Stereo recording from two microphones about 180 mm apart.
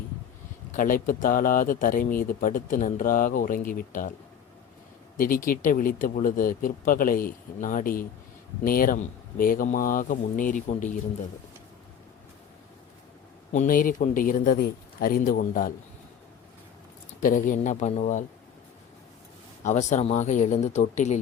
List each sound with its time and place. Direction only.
0.7 s speech: 50° left (ahead or behind)
5.1 s speech: 50° left (ahead or behind)
13.5 s speech: 45° left (ahead or behind)
17.2 s speech: 50° left (ahead or behind)
19.6 s speech: 40° left (ahead or behind)